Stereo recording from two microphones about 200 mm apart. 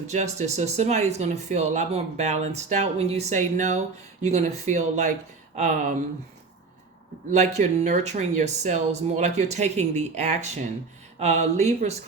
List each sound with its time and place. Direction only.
0.1 s speech: 35° right (ahead or behind)
7.3 s speech: 35° right (ahead or behind)